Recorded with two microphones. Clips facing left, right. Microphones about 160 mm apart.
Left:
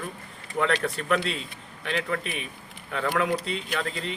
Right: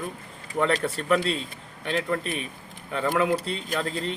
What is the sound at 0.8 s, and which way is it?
Speech, 15° right (ahead or behind).